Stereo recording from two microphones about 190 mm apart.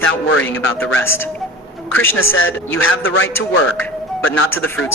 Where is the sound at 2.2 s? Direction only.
90° left.